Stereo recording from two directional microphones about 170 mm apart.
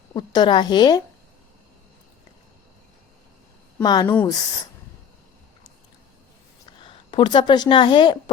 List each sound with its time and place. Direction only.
0.1 s a woman's voice: 25° left (ahead or behind)
3.8 s a woman's voice: 25° left (ahead or behind)
6.7 s speech: 30° left (ahead or behind)